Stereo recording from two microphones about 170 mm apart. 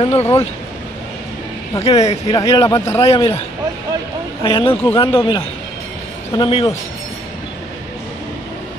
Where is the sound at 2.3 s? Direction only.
20° left (ahead or behind).